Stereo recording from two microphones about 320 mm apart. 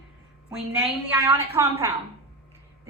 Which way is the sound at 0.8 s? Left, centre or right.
Centre.